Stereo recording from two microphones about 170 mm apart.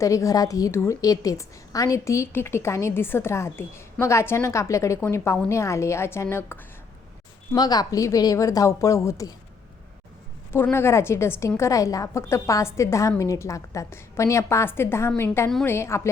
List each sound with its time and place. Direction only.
0.0 s a woman's voice: 20° left (ahead or behind)
10.5 s a woman's voice: 15° left (ahead or behind)
15.4 s a woman's voice: 5° left (ahead or behind)
15.7 s a woman's voice: 15° left (ahead or behind)